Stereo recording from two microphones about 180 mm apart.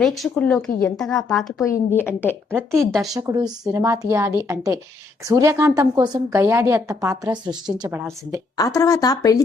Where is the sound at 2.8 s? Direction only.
Centre (ahead or behind).